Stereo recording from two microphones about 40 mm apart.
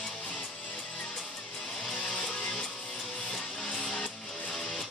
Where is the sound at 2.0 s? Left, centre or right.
Left.